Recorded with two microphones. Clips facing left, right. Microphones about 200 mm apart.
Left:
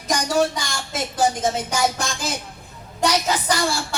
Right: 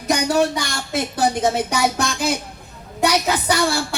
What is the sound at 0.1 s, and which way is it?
A woman's voice, 60° right (ahead or behind).